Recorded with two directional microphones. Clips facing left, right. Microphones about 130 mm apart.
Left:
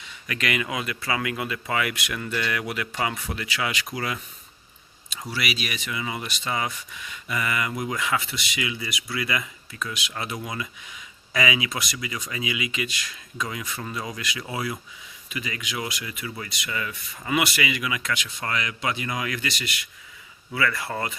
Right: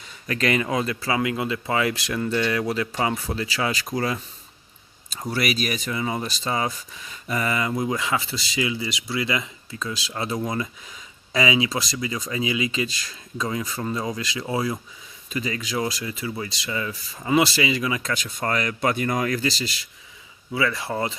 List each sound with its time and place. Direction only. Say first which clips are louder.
0.0 s speech: right 5 dB; 35° right (ahead or behind)
5.3 s speech: right 6 dB; 45° right (ahead or behind); by 21.2 s 25° right (ahead or behind)